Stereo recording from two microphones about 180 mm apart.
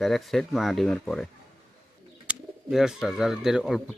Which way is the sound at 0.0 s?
Centre (ahead or behind).